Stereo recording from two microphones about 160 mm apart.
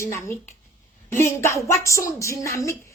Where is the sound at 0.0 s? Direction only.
15° left (ahead or behind).